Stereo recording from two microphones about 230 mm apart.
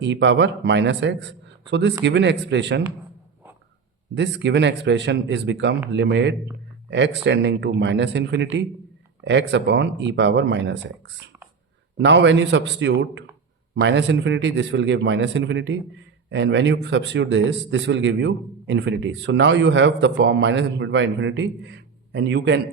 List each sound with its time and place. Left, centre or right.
0.0 s a man's voice: right
4.1 s a man's voice: right
11.3 s a sound: centre
12.0 s a man's voice: right